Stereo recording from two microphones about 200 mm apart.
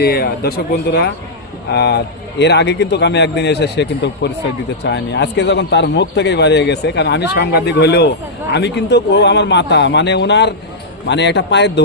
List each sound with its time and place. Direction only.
0.0 s speech: 50° left (ahead or behind)